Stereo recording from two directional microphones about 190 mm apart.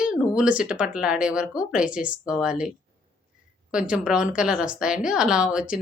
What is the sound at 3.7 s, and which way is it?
Speech, 5° right (ahead or behind).